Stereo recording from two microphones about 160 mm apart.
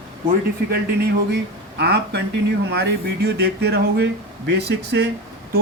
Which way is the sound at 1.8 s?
90° right.